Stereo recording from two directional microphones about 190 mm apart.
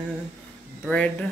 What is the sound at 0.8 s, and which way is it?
Speech, 5° left (ahead or behind).